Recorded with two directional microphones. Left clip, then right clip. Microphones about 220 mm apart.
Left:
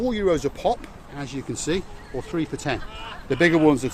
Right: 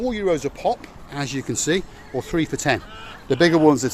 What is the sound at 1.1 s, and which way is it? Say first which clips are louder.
Speech: right 6 dB; 40° right (ahead or behind).